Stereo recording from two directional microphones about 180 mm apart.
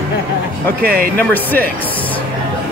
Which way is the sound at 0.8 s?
55° right (ahead or behind).